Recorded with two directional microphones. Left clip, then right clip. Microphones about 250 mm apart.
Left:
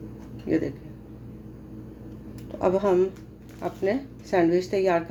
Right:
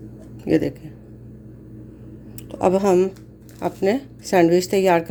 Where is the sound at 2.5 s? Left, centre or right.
Right.